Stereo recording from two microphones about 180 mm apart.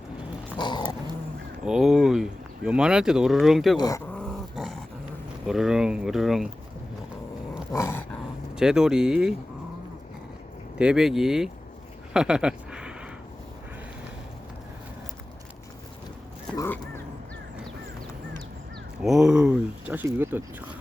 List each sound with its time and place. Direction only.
0.5 s dog: 25° left (ahead or behind)
1.6 s speech: 5° right (ahead or behind)
3.8 s speech: 20° left (ahead or behind)
4.1 s dog: 5° left (ahead or behind)
5.5 s speech: 5° right (ahead or behind)
7.7 s dog: 15° left (ahead or behind)
8.5 s speech: 5° right (ahead or behind)
10.8 s speech: 5° right (ahead or behind)
16.6 s speech: 10° left (ahead or behind)
19.0 s speech: 5° right (ahead or behind)